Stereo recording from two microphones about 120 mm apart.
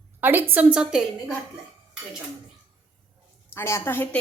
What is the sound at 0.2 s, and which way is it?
Speech, 15° right (ahead or behind).